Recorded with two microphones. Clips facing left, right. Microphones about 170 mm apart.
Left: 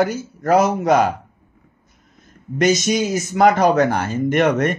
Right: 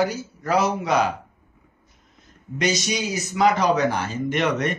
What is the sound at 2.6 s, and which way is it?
Speech, 50° left (ahead or behind).